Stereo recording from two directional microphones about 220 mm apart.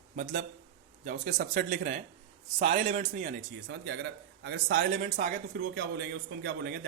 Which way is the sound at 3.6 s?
50° right (ahead or behind).